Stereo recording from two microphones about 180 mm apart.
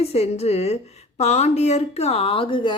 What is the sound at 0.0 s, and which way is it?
A woman's voice, 35° left (ahead or behind).